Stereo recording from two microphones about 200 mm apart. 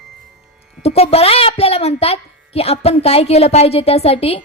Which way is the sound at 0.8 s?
30° left (ahead or behind).